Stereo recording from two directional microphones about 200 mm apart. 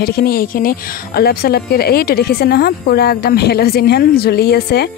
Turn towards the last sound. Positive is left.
turn(degrees=55)  # may be behind; listen again after turning